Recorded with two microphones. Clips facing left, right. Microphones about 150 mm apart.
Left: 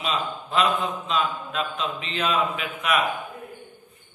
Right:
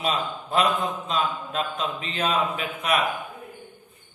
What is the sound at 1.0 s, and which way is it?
A man's voice, 40° right (ahead or behind).